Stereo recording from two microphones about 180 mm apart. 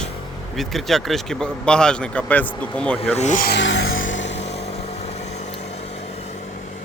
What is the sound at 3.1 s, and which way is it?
Speech, 40° left (ahead or behind).